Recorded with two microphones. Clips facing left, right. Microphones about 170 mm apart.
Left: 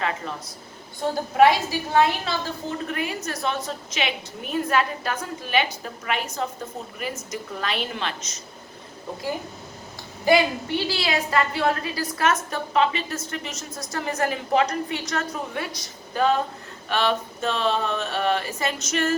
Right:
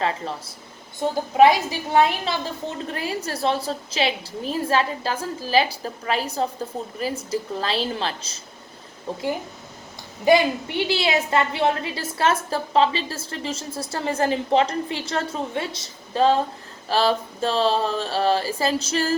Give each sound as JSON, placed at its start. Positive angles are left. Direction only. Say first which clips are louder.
{"t": 0.0, "sound": "a woman's voice", "louder": "right 3 dB", "side_deg": -30}
{"t": 1.0, "sound": "a woman's voice", "louder": "right 2 dB", "side_deg": -15}
{"t": 2.8, "sound": "a woman's voice", "louder": "right 1 dB", "side_deg": -30}
{"t": 10.8, "sound": "a woman's voice", "louder": "right 3 dB", "side_deg": -25}